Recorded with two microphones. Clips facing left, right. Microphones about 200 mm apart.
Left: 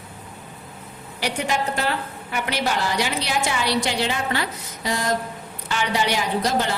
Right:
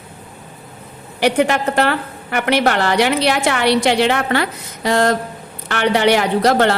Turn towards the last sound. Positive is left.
turn(degrees=-70)  # may be behind; listen again after turning